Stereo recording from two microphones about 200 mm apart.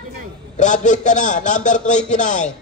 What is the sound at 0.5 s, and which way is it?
A man's voice, 40° left (ahead or behind).